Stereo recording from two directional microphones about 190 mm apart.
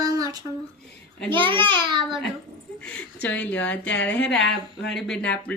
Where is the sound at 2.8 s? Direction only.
10° left (ahead or behind).